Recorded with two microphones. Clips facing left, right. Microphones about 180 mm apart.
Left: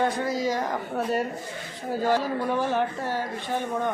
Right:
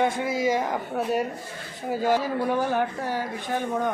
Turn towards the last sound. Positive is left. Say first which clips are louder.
# right 1 dB
turn(degrees=0)  # may be behind; listen again after turning